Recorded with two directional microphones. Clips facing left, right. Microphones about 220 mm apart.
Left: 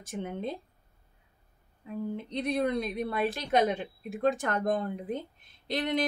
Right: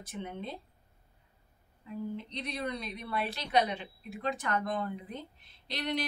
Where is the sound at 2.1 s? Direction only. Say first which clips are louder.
Left 8 dB; 50° left (ahead or behind).